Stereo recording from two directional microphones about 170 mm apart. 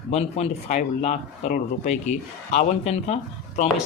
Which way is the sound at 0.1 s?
40° left (ahead or behind).